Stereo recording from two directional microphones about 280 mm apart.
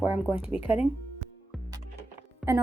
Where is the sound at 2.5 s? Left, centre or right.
Centre.